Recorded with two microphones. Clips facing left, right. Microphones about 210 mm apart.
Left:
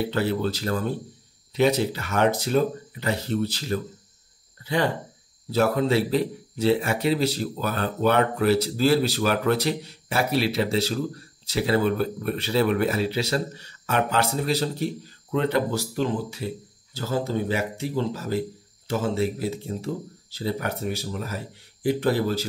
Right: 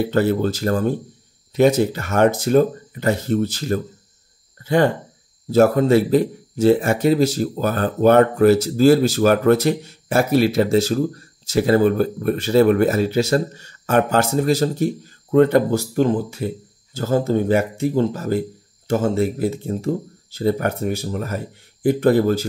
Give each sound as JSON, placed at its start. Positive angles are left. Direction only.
{"t": 0.0, "sound": "speech", "side_deg": -45}